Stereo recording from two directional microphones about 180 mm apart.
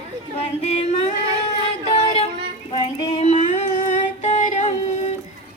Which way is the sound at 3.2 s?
40° left (ahead or behind).